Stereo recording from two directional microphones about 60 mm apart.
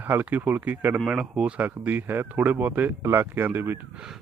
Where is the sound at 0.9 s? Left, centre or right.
Centre.